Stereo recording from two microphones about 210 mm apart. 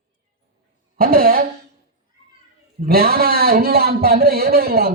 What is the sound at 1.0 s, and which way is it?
Speech, 45° right (ahead or behind).